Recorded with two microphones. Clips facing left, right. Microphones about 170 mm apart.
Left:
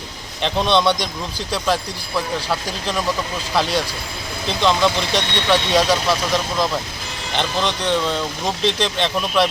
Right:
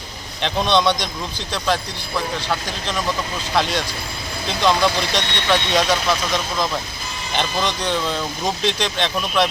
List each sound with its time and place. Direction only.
0.4 s speech: centre (ahead or behind)